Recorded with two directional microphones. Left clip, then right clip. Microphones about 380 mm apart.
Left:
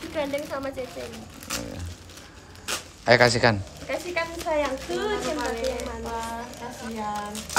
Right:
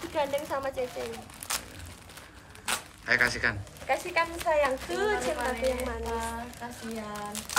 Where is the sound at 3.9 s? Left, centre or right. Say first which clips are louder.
Right 1 dB; right.